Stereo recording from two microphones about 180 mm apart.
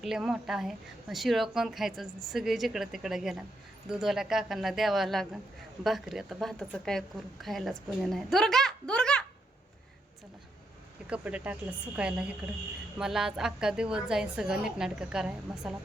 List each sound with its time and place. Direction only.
0.0 s a woman's voice: centre (ahead or behind)
11.1 s a woman's voice: 5° right (ahead or behind)